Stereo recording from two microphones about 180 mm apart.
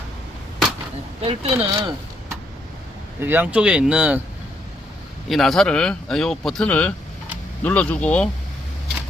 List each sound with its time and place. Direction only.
1.2 s speech: 30° right (ahead or behind)
3.2 s speech: 10° right (ahead or behind)
5.3 s speech: centre (ahead or behind)